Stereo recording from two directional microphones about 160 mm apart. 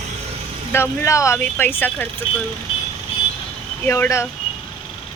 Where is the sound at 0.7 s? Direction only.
15° left (ahead or behind).